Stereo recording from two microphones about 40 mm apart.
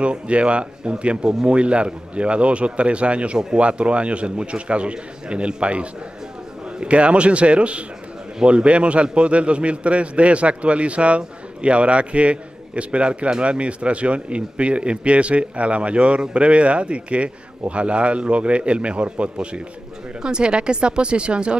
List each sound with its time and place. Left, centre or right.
0.0 s a man's voice: right